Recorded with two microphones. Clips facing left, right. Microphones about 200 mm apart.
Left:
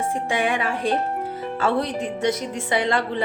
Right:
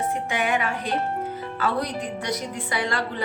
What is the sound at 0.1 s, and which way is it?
Speech, 30° left (ahead or behind).